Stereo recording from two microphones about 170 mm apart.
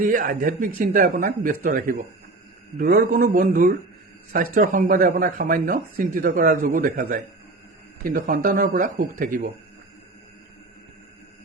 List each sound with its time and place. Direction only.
0.0 s a man's voice: 55° right (ahead or behind)